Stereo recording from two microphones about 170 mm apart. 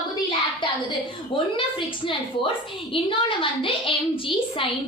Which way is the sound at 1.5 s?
30° left (ahead or behind).